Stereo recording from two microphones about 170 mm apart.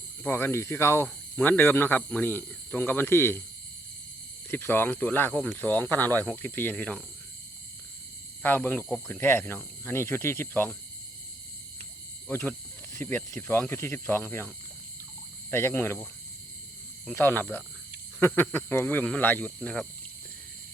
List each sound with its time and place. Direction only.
0.2 s speech: 15° left (ahead or behind)
4.5 s speech: 10° left (ahead or behind)
8.4 s speech: 10° left (ahead or behind)
12.3 s speech: 15° left (ahead or behind)
17.2 s speech: 10° left (ahead or behind)